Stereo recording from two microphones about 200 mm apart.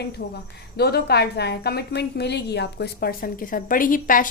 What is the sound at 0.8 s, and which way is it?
A woman's voice, 55° left (ahead or behind).